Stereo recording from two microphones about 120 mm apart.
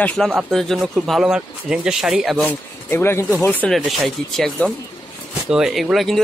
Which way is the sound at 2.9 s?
20° left (ahead or behind).